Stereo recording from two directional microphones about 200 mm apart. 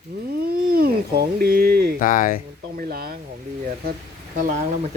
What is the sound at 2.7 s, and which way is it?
Speech, 50° right (ahead or behind).